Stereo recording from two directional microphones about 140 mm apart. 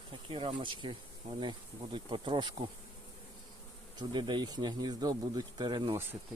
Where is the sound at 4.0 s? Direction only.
30° right (ahead or behind).